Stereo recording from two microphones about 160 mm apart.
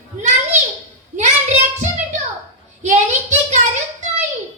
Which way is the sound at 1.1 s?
45° right (ahead or behind).